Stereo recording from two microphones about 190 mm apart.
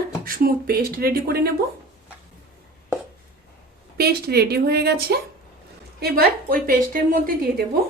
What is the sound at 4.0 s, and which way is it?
A woman's voice, 55° right (ahead or behind).